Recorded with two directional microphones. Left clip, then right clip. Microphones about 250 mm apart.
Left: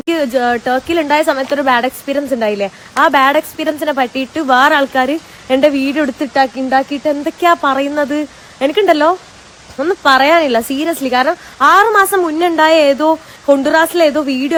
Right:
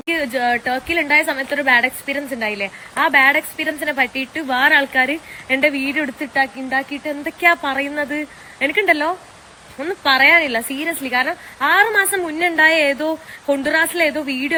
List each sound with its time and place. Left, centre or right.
0.0 s speech: centre